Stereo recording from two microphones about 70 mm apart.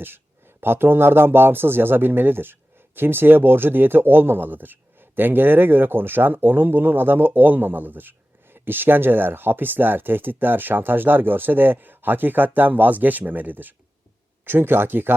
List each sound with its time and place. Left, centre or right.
0.0 s speech: right